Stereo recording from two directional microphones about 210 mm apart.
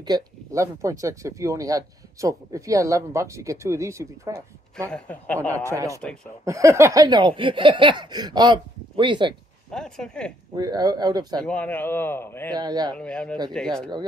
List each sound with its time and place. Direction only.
0.0 s speech: 15° right (ahead or behind)
4.8 s a man's voice: 5° left (ahead or behind)
5.6 s speech: 15° right (ahead or behind)
6.4 s a sound: 15° right (ahead or behind)
9.7 s speech: 5° left (ahead or behind)
10.5 s a sound: 20° right (ahead or behind)
11.4 s a man's voice: 5° left (ahead or behind)
12.5 s a sound: 20° right (ahead or behind)
12.9 s speech: 5° left (ahead or behind)